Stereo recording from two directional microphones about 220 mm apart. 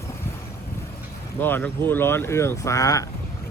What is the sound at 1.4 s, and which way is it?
Speech, 10° left (ahead or behind).